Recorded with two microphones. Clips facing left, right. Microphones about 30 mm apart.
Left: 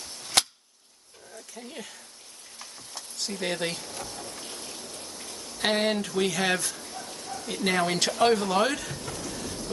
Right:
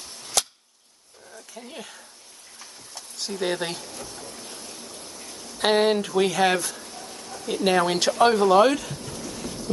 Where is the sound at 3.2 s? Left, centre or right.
Centre.